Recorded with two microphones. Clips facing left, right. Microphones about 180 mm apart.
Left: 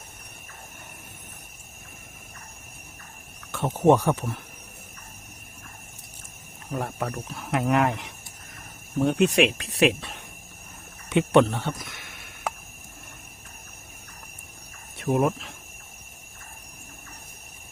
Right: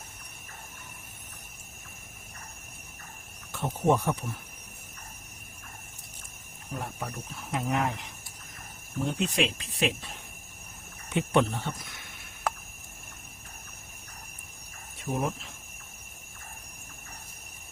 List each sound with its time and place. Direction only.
3.5 s speech: 80° left
6.7 s speech: 75° left (ahead or behind)
11.1 s speech: 90° left
14.9 s speech: 70° left (ahead or behind)